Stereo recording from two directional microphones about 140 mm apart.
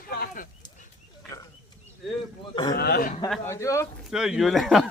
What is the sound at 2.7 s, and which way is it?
Speech, 90° left.